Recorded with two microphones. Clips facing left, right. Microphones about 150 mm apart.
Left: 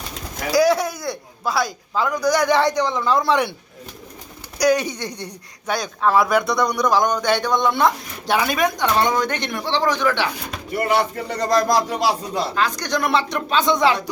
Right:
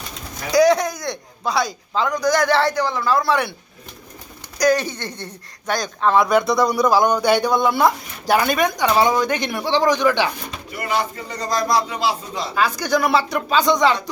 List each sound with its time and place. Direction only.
0.5 s a man's voice: 5° left (ahead or behind)
4.5 s speech: 10° left (ahead or behind); by 10.2 s 15° right (ahead or behind)
10.8 s speech: 60° left (ahead or behind)
12.5 s speech: 5° right (ahead or behind)